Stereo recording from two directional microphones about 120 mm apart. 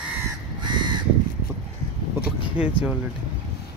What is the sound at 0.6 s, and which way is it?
Crow, 40° right (ahead or behind).